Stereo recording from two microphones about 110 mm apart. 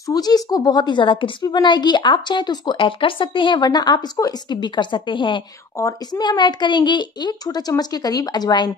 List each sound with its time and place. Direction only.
0.0 s a woman's voice: 35° left (ahead or behind)
5.8 s a woman's voice: 30° left (ahead or behind)
6.2 s a woman's voice: 40° left (ahead or behind)